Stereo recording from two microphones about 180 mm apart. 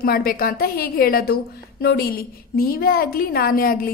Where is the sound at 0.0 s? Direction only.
55° left (ahead or behind).